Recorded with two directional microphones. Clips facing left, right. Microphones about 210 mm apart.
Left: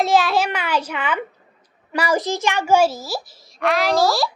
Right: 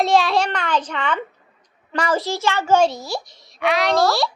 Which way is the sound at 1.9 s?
10° left (ahead or behind).